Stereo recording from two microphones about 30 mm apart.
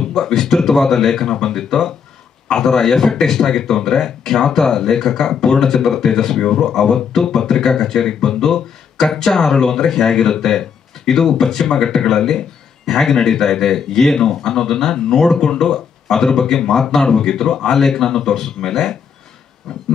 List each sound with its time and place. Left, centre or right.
0.0 s speech: centre